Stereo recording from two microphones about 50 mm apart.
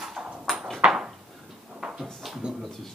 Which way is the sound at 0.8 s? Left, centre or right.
Centre.